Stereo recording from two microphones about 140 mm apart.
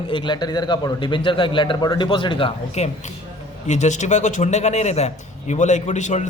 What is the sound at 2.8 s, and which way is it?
A man's voice, 50° left (ahead or behind).